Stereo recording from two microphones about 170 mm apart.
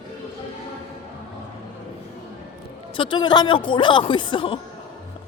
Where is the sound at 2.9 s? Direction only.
30° left (ahead or behind).